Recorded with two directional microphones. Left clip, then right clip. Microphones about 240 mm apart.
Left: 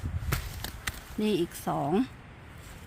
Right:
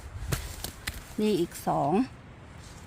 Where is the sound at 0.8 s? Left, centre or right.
Centre.